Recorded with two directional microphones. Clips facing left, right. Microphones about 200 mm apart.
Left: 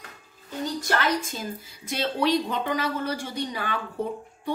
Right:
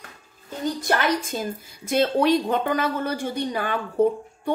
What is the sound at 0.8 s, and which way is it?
A woman's voice, 55° right (ahead or behind).